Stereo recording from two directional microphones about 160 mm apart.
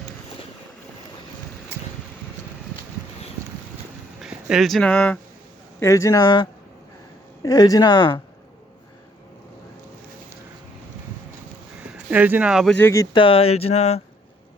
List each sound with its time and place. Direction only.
4.2 s speech: 5° right (ahead or behind)
5.8 s speech: 20° left (ahead or behind)
11.8 s speech: 10° right (ahead or behind)
12.8 s speech: 20° left (ahead or behind)
13.1 s speech: 35° left (ahead or behind)